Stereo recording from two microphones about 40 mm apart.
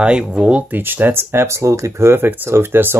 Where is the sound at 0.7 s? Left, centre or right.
Right.